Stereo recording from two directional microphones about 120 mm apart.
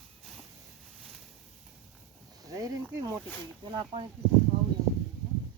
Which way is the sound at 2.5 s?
30° right (ahead or behind).